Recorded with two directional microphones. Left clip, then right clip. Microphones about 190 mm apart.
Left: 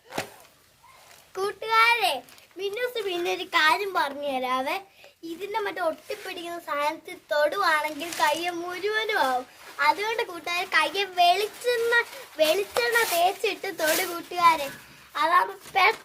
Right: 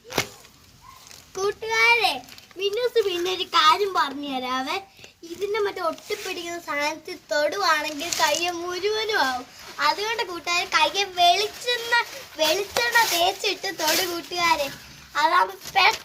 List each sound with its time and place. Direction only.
1.4 s a child's voice: 40° left (ahead or behind)
6.2 s a child's voice: 20° left (ahead or behind)